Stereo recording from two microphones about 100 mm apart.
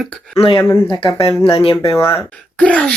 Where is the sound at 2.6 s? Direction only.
15° left (ahead or behind).